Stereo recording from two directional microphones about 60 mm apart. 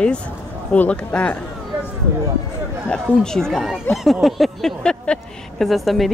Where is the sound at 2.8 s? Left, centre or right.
Centre.